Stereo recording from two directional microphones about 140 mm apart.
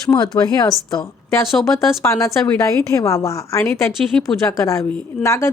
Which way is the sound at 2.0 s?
20° left (ahead or behind).